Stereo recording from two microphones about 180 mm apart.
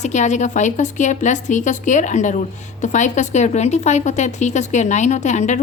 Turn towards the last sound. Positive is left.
turn(degrees=40)  # may be behind; listen again after turning